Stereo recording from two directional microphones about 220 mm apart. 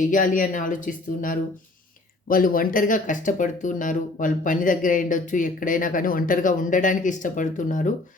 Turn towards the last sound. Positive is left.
turn(degrees=35)  # may be behind; listen again after turning